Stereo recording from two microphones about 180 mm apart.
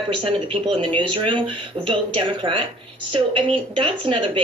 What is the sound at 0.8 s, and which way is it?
A woman's voice, 25° right (ahead or behind).